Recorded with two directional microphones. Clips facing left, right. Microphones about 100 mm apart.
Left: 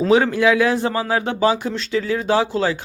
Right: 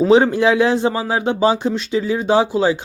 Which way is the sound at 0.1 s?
25° right (ahead or behind).